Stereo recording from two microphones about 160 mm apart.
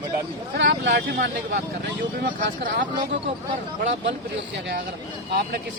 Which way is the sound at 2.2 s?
75° right (ahead or behind).